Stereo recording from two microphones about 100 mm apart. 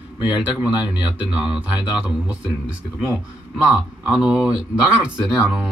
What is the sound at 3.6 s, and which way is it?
Speech, 10° right (ahead or behind).